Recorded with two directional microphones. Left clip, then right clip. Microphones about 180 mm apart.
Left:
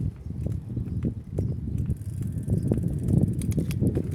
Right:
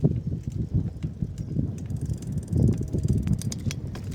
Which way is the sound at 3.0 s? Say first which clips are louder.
Left 6 dB; 55° right (ahead or behind).